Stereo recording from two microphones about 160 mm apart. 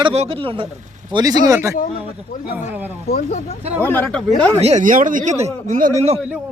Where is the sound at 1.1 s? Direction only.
25° right (ahead or behind).